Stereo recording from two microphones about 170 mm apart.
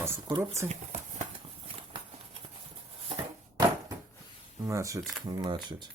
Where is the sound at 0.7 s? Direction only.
40° right (ahead or behind).